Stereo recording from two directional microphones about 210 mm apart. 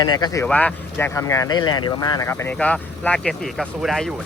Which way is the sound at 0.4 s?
5° left (ahead or behind).